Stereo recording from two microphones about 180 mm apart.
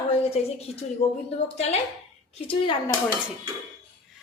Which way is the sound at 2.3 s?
35° left (ahead or behind).